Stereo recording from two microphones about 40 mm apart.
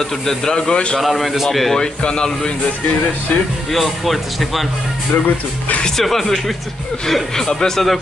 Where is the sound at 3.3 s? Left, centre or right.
Left.